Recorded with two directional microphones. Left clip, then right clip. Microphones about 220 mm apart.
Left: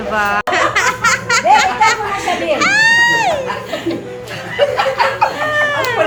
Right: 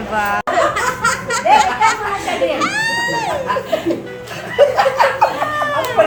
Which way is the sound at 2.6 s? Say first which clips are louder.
Left 7 dB; 5° right (ahead or behind).